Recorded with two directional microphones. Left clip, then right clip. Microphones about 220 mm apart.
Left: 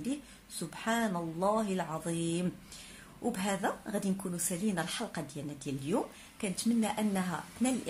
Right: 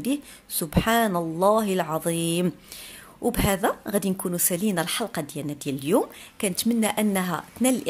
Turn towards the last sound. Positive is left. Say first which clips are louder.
# right 10 dB
turn(degrees=-45)  # may be behind; listen again after turning